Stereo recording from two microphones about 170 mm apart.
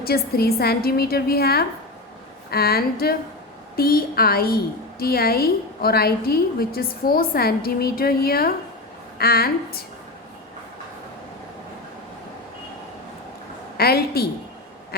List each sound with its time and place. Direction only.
0.0 s a woman's voice: 65° left (ahead or behind)
13.7 s a woman's voice: 65° left (ahead or behind)